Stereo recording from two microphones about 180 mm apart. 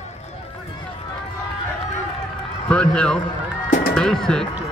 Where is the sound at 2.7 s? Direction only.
5° left (ahead or behind).